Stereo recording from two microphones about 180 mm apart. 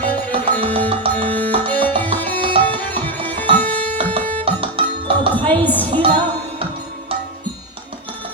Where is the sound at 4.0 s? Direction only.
30° right (ahead or behind).